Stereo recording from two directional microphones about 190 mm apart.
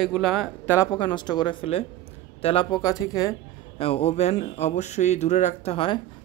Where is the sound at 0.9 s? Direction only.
25° left (ahead or behind).